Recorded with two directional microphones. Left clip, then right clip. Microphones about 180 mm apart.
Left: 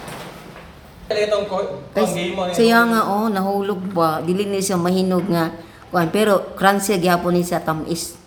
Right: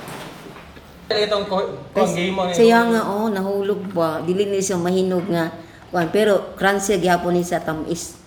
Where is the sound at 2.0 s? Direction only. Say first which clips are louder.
Right 1 dB; 20° left (ahead or behind).